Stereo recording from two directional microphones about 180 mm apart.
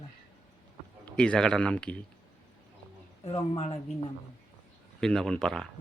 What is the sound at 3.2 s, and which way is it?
Speech, 30° left (ahead or behind).